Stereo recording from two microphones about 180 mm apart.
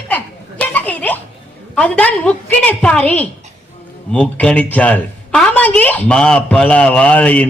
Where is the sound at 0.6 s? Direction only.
10° left (ahead or behind).